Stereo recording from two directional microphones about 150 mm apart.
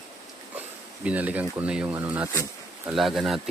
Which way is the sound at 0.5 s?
10° right (ahead or behind).